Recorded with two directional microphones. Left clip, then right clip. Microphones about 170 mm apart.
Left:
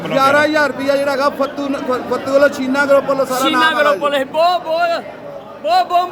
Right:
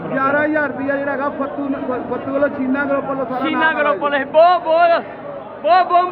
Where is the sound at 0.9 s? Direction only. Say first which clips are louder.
Left 5 dB; 65° left (ahead or behind).